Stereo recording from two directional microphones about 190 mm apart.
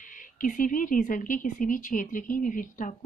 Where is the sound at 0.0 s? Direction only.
45° left (ahead or behind).